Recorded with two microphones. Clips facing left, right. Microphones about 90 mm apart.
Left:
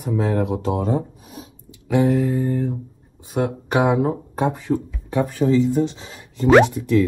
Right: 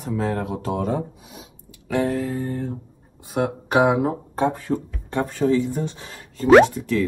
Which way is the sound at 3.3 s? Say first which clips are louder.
Right 1 dB; centre (ahead or behind).